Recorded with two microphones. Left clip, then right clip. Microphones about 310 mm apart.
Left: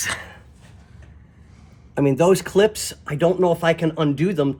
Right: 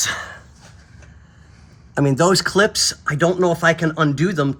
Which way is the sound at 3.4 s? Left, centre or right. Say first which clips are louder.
Right 2 dB; right.